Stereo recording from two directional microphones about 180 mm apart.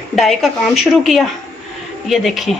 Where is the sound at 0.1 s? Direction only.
Centre (ahead or behind).